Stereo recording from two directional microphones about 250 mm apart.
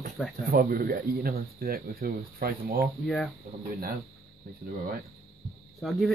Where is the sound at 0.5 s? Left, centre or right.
Right.